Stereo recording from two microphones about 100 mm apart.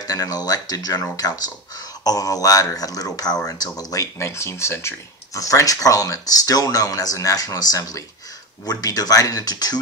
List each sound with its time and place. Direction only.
0.0 s speech: 40° left (ahead or behind)